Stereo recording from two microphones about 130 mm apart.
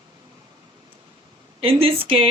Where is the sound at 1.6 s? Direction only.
45° right (ahead or behind).